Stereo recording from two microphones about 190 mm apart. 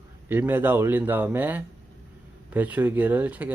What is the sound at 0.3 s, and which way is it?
Speech, 10° right (ahead or behind).